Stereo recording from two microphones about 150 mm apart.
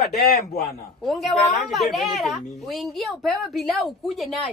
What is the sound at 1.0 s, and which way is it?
Speech, centre (ahead or behind).